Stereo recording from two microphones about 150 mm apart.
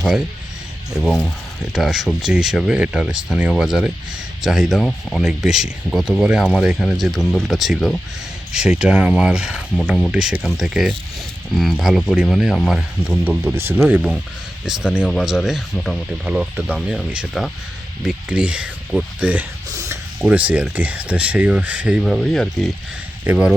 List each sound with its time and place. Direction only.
0.9 s speech: centre (ahead or behind); by 13.7 s 15° right (ahead or behind)
13.7 s speech: 5° right (ahead or behind)
19.7 s a sound: 20° right (ahead or behind)
20.2 s speech: 10° right (ahead or behind)
22.0 s speech: centre (ahead or behind)
23.2 s speech: 10° right (ahead or behind)